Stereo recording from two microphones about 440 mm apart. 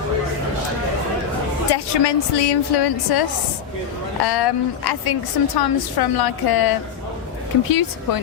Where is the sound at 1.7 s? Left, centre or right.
Left.